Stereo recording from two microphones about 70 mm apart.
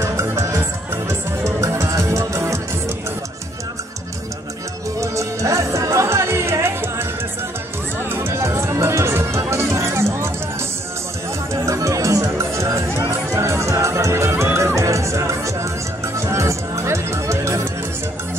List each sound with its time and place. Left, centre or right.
0.0 s music: right
5.0 s music: right
8.1 s music: right
11.6 s music: right